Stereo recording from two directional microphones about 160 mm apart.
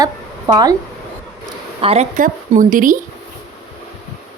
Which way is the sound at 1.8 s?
40° right (ahead or behind).